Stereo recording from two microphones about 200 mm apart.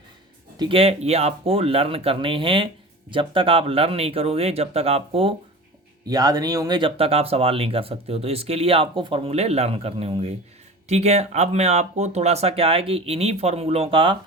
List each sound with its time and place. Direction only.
0.6 s speech: 30° right (ahead or behind)
6.1 s speech: 20° right (ahead or behind)